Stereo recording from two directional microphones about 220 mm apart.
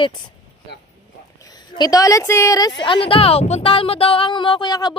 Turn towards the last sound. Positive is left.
turn(degrees=20)  # may be behind; listen again after turning